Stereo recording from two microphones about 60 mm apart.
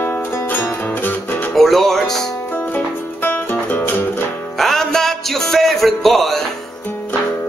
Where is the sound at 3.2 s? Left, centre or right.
Left.